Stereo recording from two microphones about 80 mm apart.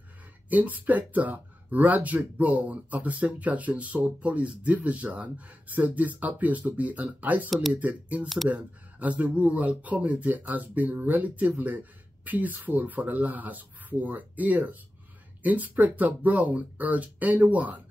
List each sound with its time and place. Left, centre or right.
0.5 s speech: right
7.4 s speech: centre
7.8 s speech: centre